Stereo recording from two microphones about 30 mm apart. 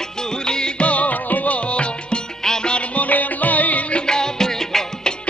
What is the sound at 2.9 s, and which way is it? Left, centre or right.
Music, left.